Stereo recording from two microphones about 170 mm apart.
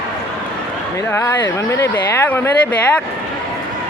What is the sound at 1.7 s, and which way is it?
Speech, 15° left (ahead or behind).